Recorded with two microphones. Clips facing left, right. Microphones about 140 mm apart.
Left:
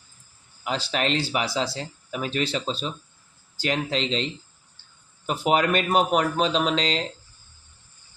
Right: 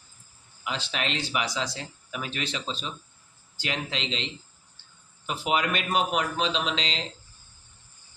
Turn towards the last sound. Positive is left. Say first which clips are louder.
# left 6 dB
turn(degrees=45)  # may be behind; listen again after turning